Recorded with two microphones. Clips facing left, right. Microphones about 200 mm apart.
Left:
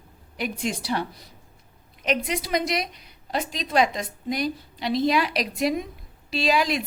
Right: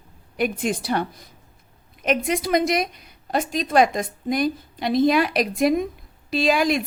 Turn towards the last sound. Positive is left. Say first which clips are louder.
# right 3 dB
turn(degrees=-50)  # may be behind; listen again after turning